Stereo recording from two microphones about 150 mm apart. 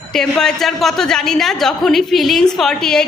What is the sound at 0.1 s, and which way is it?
A woman's voice, 5° left (ahead or behind).